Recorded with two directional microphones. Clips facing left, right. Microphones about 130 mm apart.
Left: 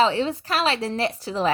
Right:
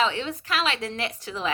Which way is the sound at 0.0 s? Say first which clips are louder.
Left 5 dB; 35° left (ahead or behind).